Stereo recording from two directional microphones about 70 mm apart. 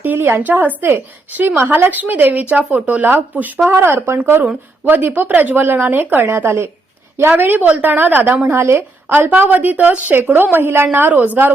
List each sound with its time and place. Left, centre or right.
0.0 s a woman's voice: right